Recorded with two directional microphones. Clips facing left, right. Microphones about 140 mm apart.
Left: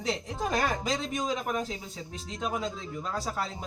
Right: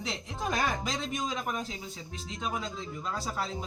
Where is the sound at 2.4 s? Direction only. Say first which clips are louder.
Left 2 dB; centre (ahead or behind).